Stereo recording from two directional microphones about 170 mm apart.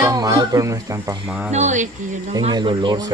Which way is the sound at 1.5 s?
45° right (ahead or behind).